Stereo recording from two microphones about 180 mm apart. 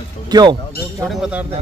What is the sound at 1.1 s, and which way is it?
Speech, 5° right (ahead or behind).